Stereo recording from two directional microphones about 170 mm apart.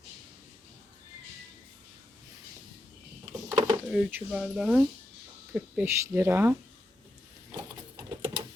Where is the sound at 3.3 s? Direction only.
25° right (ahead or behind).